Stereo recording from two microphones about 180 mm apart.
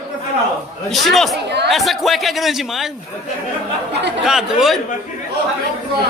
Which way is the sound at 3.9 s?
70° right (ahead or behind).